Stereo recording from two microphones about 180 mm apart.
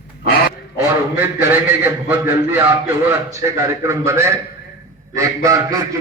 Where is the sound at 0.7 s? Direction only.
10° right (ahead or behind).